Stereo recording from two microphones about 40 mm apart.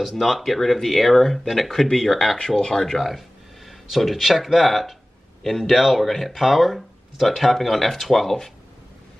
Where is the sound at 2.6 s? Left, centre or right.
Centre.